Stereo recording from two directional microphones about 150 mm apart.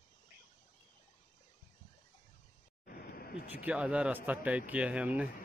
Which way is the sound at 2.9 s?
85° left.